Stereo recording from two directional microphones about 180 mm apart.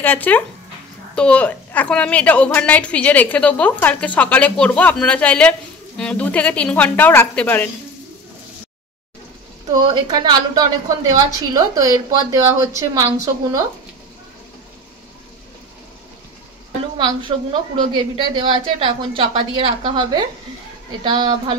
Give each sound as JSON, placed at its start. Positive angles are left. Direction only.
{"t": 0.0, "sound": "a woman's voice", "side_deg": 10}
{"t": 9.8, "sound": "a woman's voice", "side_deg": -25}
{"t": 17.0, "sound": "a woman's voice", "side_deg": -25}